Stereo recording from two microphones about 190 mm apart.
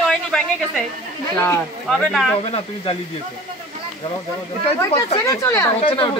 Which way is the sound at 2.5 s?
30° left (ahead or behind).